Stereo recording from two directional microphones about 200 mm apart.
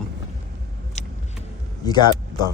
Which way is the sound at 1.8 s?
20° left (ahead or behind).